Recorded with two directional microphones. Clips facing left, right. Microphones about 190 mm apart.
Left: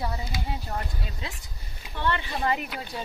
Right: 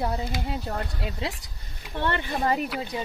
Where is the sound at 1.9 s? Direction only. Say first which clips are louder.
Right 2 dB; 55° right (ahead or behind).